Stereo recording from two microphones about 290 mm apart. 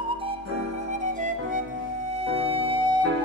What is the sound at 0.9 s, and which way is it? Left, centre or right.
Music, right.